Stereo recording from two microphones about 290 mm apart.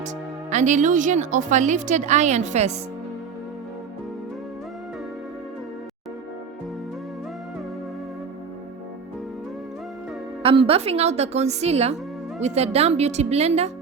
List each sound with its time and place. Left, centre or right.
0.5 s a woman's voice: right
10.4 s a woman's voice: centre